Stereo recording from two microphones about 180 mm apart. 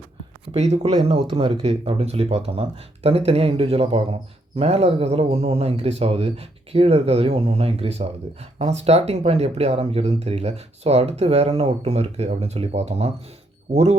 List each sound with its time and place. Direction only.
0.5 s speech: 35° right (ahead or behind)